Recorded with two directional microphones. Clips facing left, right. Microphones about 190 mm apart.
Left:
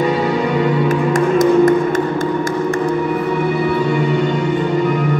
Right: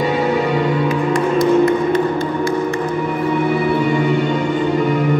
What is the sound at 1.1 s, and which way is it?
Music, 45° left (ahead or behind).